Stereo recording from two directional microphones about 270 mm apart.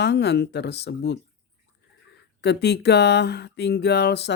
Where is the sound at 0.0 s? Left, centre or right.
Left.